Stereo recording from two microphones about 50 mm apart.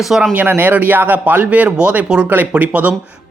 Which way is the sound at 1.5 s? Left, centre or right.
Right.